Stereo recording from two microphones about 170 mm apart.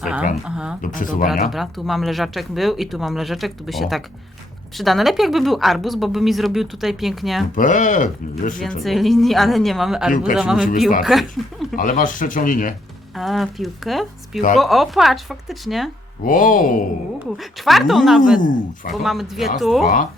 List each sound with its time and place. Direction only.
0.0 s a woman's voice: 5° right (ahead or behind)
0.8 s speech: 50° left (ahead or behind)
1.5 s a woman's voice: centre (ahead or behind)
7.5 s speech: 50° left (ahead or behind)
8.8 s a woman's voice: centre (ahead or behind)
11.8 s speech: 50° left (ahead or behind)
13.1 s a woman's voice: centre (ahead or behind)
16.2 s speech: 50° left (ahead or behind)
17.2 s a woman's voice: centre (ahead or behind)
18.3 s speech: 50° left (ahead or behind)
19.0 s a woman's voice: centre (ahead or behind)